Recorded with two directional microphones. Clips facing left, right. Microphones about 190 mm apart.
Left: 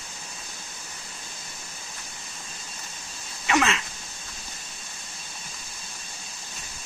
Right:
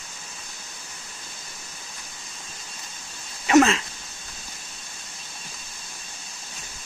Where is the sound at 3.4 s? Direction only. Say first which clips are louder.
Right 7 dB; 35° right (ahead or behind).